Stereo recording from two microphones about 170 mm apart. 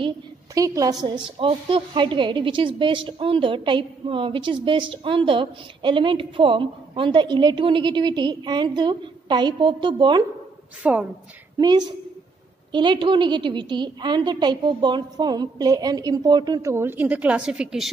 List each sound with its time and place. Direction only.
0.6 s a woman's voice: 20° right (ahead or behind)
10.8 s speech: 5° right (ahead or behind)
11.5 s a woman's voice: 25° right (ahead or behind); by 17.9 s 5° right (ahead or behind)